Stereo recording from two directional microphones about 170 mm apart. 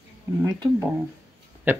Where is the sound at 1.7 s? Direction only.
10° right (ahead or behind).